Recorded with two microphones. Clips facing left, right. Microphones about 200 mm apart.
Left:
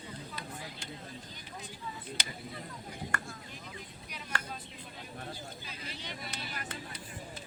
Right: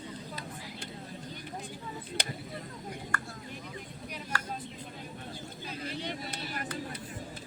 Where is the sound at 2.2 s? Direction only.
60° right (ahead or behind).